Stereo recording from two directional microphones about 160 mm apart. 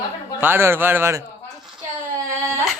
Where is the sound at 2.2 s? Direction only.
20° right (ahead or behind).